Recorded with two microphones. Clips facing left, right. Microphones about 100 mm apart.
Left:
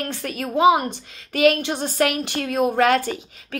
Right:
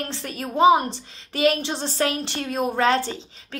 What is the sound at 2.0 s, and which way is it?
A woman's voice, 30° right (ahead or behind).